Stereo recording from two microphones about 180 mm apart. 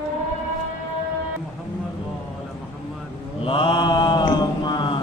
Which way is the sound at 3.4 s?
30° left (ahead or behind).